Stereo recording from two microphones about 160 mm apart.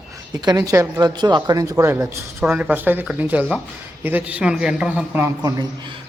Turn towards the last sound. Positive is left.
turn(degrees=-25)  # may be behind; listen again after turning